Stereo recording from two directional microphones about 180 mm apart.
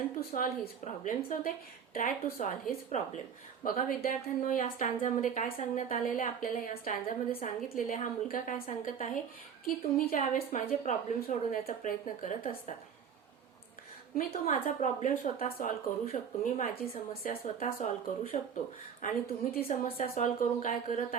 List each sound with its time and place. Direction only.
0.2 s a woman's voice: 55° left (ahead or behind)
14.2 s a woman's voice: 50° left (ahead or behind)
19.0 s a woman's voice: 55° left (ahead or behind)
19.6 s a woman's voice: 45° left (ahead or behind)